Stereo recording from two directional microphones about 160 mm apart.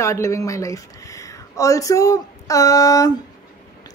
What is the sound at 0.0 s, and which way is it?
A woman's voice, 20° left (ahead or behind).